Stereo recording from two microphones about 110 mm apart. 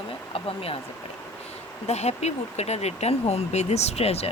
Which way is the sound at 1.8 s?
85° left.